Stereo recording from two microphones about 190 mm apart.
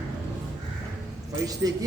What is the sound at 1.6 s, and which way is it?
Speech, 15° right (ahead or behind).